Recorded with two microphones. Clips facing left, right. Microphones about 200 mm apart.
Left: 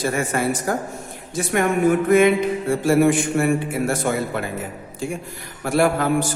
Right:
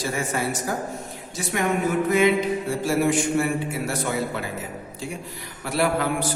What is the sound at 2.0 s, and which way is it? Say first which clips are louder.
A man's voice: left 2 dB; 55° left (ahead or behind).